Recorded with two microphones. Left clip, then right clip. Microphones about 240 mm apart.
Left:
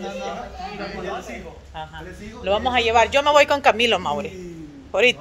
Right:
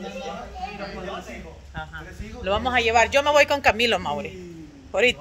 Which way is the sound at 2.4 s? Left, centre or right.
Right.